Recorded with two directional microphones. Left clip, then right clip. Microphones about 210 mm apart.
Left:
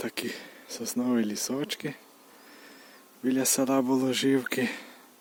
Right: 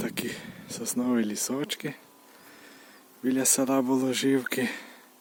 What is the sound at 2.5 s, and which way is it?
Speech, centre (ahead or behind).